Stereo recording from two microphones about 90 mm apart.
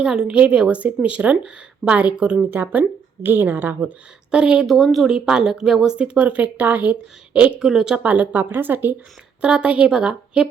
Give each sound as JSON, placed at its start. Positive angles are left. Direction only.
{"t": 0.0, "sound": "a woman's voice", "side_deg": -10}
{"t": 7.9, "sound": "a woman's voice", "side_deg": -15}
{"t": 9.4, "sound": "speech", "side_deg": -10}